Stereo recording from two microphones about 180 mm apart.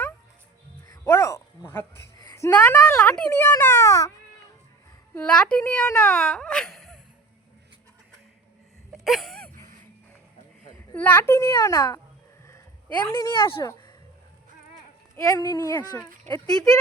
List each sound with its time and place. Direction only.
1.0 s speech: 15° left (ahead or behind)
5.1 s speech: 5° left (ahead or behind)
8.9 s a sound: centre (ahead or behind)
10.9 s speech: 10° left (ahead or behind)
15.1 s speech: 20° left (ahead or behind)